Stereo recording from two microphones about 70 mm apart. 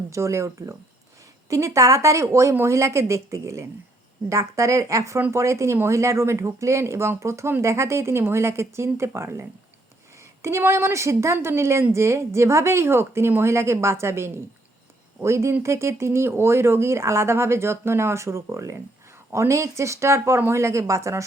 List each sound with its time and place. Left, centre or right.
0.1 s a woman's voice: right
10.6 s a woman's voice: right